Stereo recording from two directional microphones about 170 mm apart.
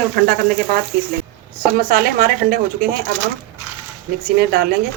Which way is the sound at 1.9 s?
55° right (ahead or behind).